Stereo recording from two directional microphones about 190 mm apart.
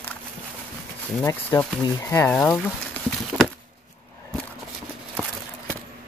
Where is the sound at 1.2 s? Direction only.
15° left (ahead or behind).